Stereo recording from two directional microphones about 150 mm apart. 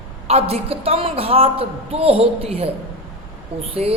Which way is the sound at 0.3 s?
45° right (ahead or behind).